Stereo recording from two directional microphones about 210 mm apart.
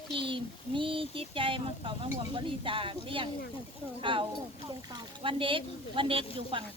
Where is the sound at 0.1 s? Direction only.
25° right (ahead or behind).